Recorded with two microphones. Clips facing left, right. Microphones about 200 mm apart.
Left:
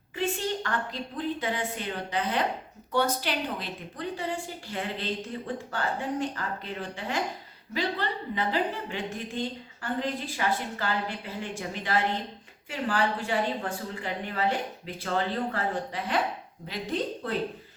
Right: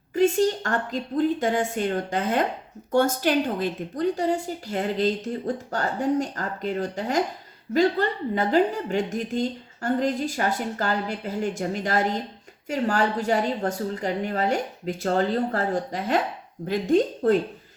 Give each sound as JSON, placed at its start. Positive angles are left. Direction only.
{"t": 0.1, "sound": "a woman's voice", "side_deg": -45}